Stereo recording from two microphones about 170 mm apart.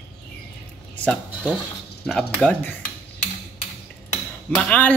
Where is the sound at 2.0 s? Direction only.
5° left (ahead or behind).